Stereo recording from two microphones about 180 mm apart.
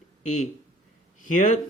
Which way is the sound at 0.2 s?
40° left (ahead or behind).